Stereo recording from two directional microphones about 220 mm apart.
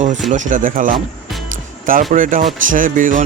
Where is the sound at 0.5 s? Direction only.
40° right (ahead or behind).